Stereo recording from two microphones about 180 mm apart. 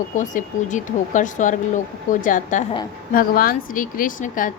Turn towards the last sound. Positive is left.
turn(degrees=45)  # may be behind; listen again after turning